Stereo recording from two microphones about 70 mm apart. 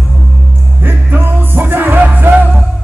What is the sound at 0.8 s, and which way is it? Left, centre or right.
Music, right.